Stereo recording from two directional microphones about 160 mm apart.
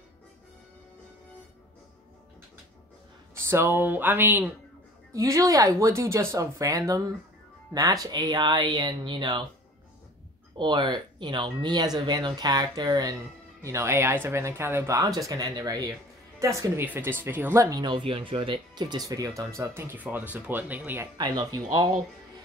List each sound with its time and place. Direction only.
3.4 s speech: 15° right (ahead or behind)
10.6 s speech: 30° right (ahead or behind); by 21.1 s 10° right (ahead or behind)
21.2 s speech: 25° right (ahead or behind)